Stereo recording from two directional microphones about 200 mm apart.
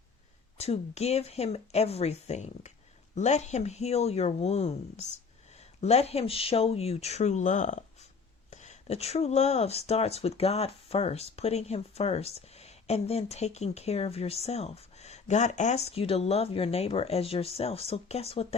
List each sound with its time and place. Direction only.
0.5 s speech: 30° left (ahead or behind)